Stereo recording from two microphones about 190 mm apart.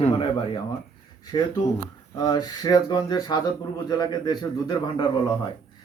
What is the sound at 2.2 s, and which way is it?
Speech, 20° left (ahead or behind).